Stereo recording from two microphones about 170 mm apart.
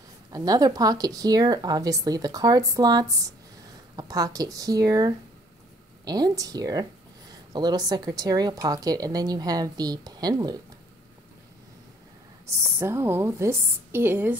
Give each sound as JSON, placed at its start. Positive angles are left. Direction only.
{"t": 0.3, "sound": "speech", "side_deg": -20}
{"t": 12.4, "sound": "a woman's voice", "side_deg": -15}